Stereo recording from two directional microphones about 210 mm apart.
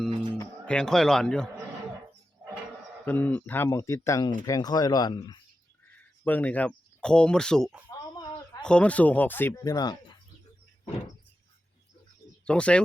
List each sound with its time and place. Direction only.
0.6 s speech: 5° left (ahead or behind)
3.1 s speech: 10° left (ahead or behind)
6.2 s speech: 10° left (ahead or behind)
7.9 s a sound: 20° left (ahead or behind)
8.6 s speech: 5° left (ahead or behind)
12.5 s speech: 5° left (ahead or behind)